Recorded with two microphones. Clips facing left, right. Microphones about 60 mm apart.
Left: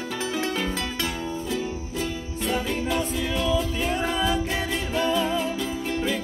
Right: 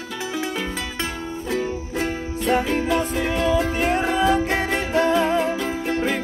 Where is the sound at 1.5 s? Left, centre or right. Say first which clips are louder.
Right 4 dB; right.